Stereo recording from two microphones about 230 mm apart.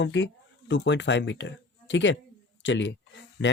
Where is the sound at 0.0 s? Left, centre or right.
Left.